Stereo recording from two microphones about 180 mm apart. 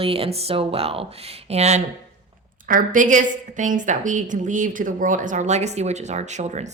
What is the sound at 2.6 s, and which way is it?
A woman's voice, 50° right (ahead or behind).